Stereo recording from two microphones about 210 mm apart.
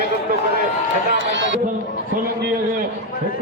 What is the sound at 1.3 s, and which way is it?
Speech, 60° right (ahead or behind).